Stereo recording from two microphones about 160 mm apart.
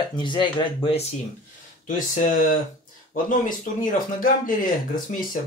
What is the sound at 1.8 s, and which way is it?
Speech, 55° left (ahead or behind).